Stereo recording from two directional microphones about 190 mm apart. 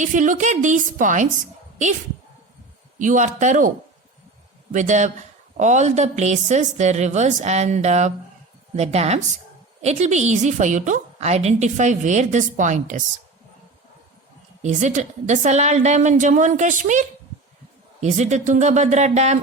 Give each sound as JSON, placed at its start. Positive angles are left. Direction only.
{"t": 0.0, "sound": "a woman's voice", "side_deg": -40}
{"t": 3.0, "sound": "a woman's voice", "side_deg": -40}
{"t": 4.7, "sound": "a woman's voice", "side_deg": -40}
{"t": 14.6, "sound": "a woman's voice", "side_deg": -40}